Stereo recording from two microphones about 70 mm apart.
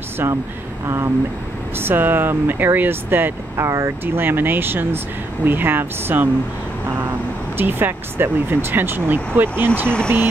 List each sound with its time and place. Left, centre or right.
0.8 s speech: right
3.6 s speech: right
7.5 s speech: right
9.8 s speech: centre